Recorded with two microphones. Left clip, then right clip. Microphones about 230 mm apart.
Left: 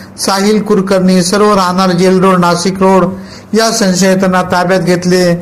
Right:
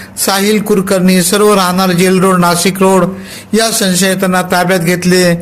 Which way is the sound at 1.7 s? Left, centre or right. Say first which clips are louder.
Left 1 dB; right.